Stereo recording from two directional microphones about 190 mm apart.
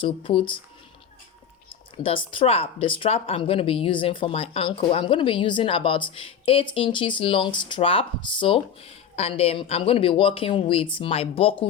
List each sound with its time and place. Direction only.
0.0 s speech: 25° left (ahead or behind)
2.0 s speech: 25° left (ahead or behind)